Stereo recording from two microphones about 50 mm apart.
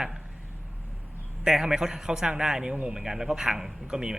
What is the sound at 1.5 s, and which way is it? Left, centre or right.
Speech, centre.